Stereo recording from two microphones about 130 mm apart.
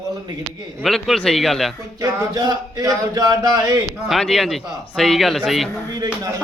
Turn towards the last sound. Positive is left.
turn(degrees=-30)  # may be behind; listen again after turning